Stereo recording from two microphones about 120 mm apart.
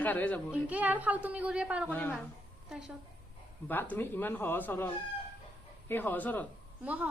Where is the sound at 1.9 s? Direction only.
15° left (ahead or behind).